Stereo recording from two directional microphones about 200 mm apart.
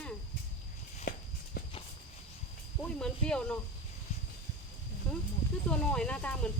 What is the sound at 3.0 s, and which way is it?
Speech, 5° left (ahead or behind).